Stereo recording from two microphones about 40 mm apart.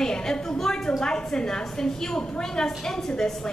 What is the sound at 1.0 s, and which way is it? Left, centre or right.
A woman's voice, centre.